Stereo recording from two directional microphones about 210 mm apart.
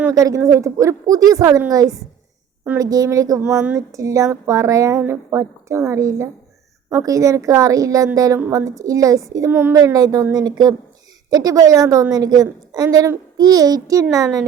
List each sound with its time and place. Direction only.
0.0 s a woman's voice: 15° right (ahead or behind)
3.4 s a woman's voice: 5° right (ahead or behind)